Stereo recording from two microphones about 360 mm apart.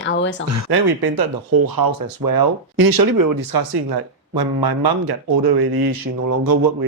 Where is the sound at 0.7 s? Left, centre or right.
Right.